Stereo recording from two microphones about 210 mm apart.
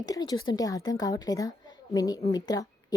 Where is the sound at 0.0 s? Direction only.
20° left (ahead or behind).